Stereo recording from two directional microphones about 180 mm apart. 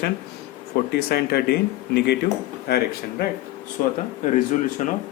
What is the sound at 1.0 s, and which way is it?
Speech, 60° left (ahead or behind).